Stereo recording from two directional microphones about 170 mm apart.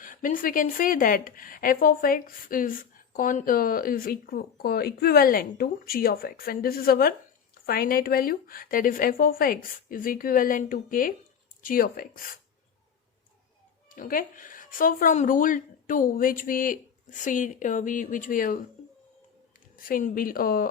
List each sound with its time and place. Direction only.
0.0 s a woman's voice: 50° left (ahead or behind)
13.8 s a woman's voice: 55° left (ahead or behind)
19.7 s a woman's voice: 55° left (ahead or behind)